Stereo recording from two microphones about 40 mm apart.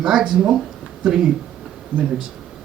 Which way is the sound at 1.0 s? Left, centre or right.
Centre.